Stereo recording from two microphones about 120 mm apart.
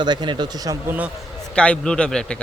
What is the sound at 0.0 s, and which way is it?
Speech, 40° right (ahead or behind).